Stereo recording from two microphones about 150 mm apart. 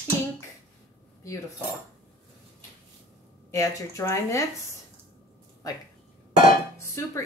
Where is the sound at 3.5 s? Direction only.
20° left (ahead or behind).